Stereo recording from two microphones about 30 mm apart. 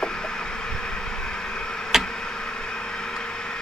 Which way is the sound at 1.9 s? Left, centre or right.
Centre.